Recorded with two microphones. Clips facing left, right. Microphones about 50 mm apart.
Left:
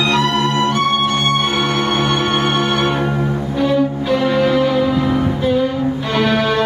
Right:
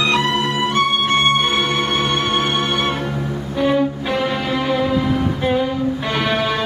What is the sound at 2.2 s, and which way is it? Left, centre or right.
Music, centre.